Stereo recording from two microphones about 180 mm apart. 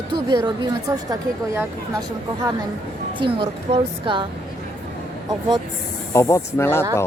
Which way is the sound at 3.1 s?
30° right (ahead or behind).